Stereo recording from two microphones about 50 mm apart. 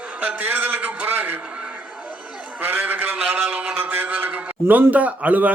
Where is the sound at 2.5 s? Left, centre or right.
Right.